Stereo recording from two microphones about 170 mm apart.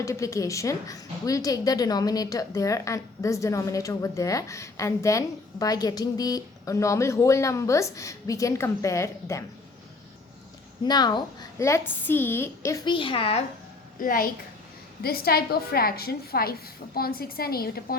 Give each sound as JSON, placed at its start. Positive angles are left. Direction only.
{"t": 0.0, "sound": "a woman's voice", "side_deg": 15}
{"t": 10.8, "sound": "a woman's voice", "side_deg": 25}
{"t": 11.6, "sound": "a woman's voice", "side_deg": 15}
{"t": 14.0, "sound": "a woman's voice", "side_deg": 55}